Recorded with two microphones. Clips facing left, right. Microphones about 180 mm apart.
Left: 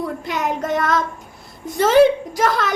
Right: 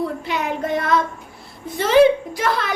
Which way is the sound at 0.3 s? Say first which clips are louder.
Left 1 dB; 45° left (ahead or behind).